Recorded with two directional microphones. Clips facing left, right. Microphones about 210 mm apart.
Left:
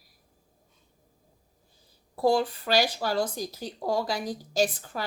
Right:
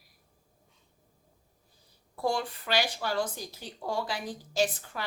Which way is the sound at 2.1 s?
35° left (ahead or behind).